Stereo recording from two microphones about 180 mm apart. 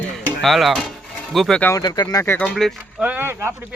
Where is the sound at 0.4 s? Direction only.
Centre (ahead or behind).